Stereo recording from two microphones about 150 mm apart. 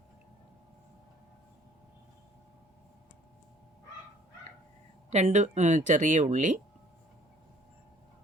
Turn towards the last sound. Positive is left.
turn(degrees=-55)  # may be behind; listen again after turning